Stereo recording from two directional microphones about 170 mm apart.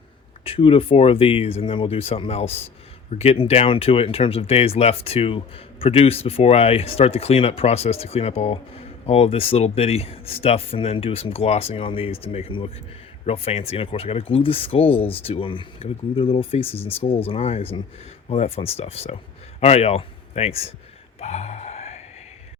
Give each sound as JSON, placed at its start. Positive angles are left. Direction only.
{"t": 0.4, "sound": "speech", "side_deg": 35}
{"t": 21.2, "sound": "gasp", "side_deg": 40}